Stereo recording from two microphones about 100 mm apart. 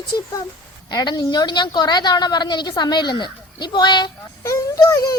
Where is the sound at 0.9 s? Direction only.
40° left (ahead or behind).